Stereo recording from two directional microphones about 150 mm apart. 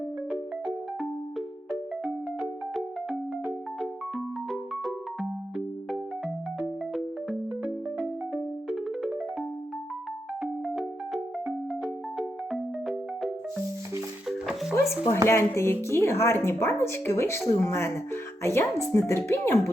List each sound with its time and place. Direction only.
1.4 s music: centre (ahead or behind)
10.4 s music: centre (ahead or behind)
14.8 s a woman's voice: 20° left (ahead or behind)